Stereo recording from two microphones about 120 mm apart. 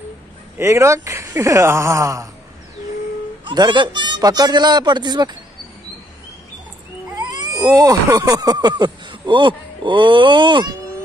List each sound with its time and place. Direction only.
0.6 s speech: 20° right (ahead or behind)
3.4 s speech: 40° right (ahead or behind)
7.1 s cat: 30° right (ahead or behind)
8.2 s speech: 30° right (ahead or behind)